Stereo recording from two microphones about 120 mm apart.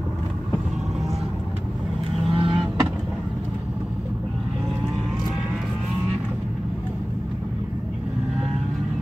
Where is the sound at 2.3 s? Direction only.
50° right (ahead or behind).